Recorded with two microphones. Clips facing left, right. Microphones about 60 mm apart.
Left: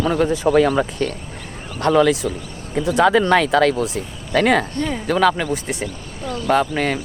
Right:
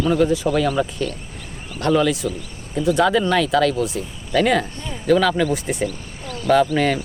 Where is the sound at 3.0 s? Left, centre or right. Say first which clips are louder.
Left 4 dB; left.